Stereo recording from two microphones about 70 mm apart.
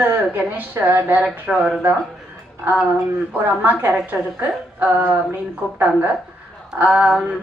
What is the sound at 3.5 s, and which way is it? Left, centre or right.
Speech, right.